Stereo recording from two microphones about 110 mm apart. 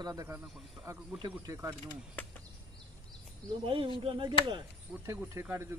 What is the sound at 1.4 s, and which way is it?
Speech, 30° right (ahead or behind).